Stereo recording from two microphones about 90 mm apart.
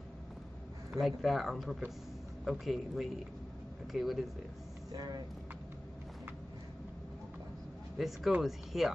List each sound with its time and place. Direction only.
0.9 s speech: centre (ahead or behind)
4.9 s speech: 45° right (ahead or behind)
8.0 s speech: centre (ahead or behind)